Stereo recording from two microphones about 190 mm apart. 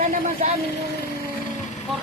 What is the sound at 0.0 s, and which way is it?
Speech, 40° right (ahead or behind).